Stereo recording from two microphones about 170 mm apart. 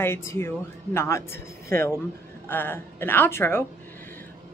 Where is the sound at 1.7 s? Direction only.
15° left (ahead or behind).